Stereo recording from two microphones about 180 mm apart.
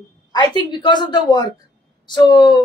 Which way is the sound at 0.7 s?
25° left (ahead or behind).